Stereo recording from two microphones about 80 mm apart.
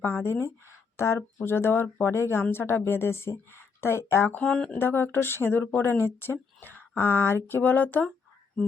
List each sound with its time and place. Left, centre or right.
0.0 s a woman's voice: left
4.4 s speech: centre
4.8 s a woman's voice: left